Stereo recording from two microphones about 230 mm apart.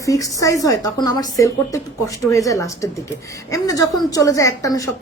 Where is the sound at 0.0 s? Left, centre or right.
Centre.